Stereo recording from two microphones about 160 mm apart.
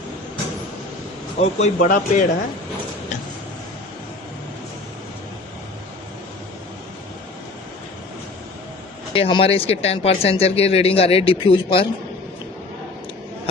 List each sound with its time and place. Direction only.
1.4 s speech: 45° left (ahead or behind)
9.1 s speech: 35° left (ahead or behind)